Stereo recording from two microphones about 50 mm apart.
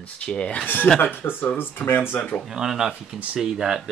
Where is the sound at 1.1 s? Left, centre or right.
Left.